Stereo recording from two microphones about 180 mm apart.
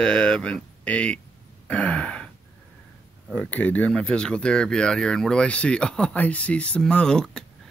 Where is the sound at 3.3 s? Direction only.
5° left (ahead or behind).